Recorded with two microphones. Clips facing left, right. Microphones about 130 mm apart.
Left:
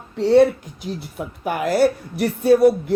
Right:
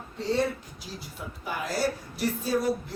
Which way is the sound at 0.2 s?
70° left (ahead or behind).